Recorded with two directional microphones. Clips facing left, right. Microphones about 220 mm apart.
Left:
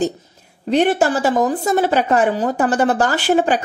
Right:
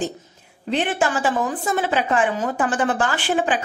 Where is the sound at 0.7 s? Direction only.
40° left (ahead or behind).